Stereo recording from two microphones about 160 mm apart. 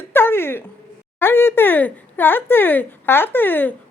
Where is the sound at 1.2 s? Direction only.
15° left (ahead or behind).